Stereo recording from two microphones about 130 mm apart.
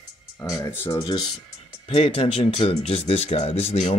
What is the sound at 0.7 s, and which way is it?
Speech, 25° left (ahead or behind).